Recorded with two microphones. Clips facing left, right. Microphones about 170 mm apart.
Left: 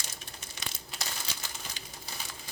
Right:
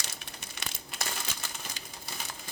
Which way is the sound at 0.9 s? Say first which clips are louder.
Right 4 dB; 55° right (ahead or behind).